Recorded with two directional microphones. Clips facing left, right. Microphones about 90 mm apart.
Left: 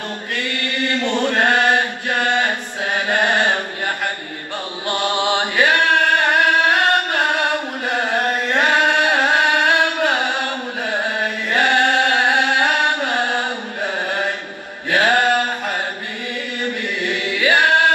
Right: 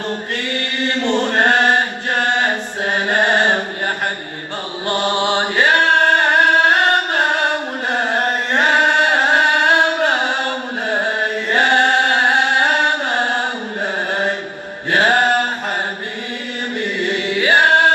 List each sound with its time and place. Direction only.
0.3 s chant: 35° right (ahead or behind)
17.0 s singing: 35° right (ahead or behind)